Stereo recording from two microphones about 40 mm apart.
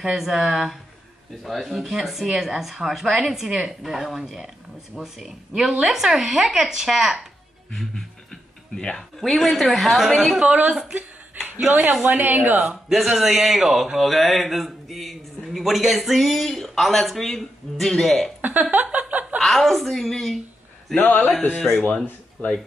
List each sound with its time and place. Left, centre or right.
0.1 s a man's voice: centre
7.7 s music: centre
9.2 s a man's voice: centre
10.7 s speech: centre
11.0 s chuckle: right
12.0 s a woman's voice: right
12.5 s a man's voice: centre
18.4 s a sound: right
19.4 s a man's voice: centre
20.9 s a man's voice: left